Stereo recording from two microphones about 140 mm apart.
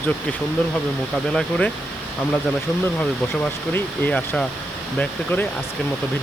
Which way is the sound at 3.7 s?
15° left (ahead or behind).